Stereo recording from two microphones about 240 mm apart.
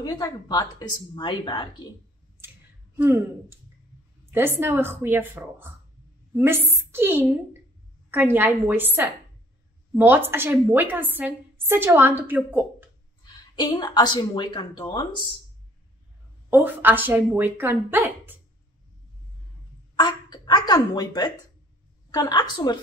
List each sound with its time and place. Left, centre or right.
0.0 s speech: centre
3.0 s a woman's voice: centre
13.2 s speech: centre
16.4 s a woman's voice: centre
20.0 s speech: centre